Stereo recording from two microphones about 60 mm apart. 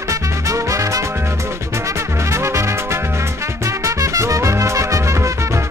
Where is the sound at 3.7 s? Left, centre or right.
Right.